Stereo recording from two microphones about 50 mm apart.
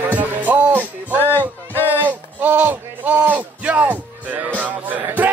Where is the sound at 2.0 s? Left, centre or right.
Right.